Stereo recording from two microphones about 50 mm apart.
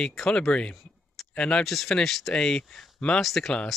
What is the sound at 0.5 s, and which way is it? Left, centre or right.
Speech, centre.